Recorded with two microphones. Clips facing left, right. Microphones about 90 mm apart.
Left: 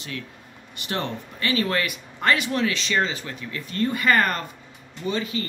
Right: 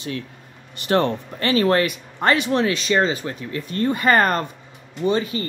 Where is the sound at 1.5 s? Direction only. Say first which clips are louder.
Right 7 dB; 35° right (ahead or behind).